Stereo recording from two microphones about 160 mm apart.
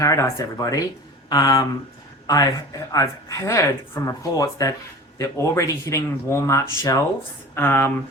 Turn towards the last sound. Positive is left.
turn(degrees=15)  # may be behind; listen again after turning